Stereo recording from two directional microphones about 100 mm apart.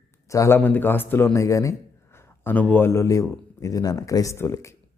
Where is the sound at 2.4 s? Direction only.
15° left (ahead or behind).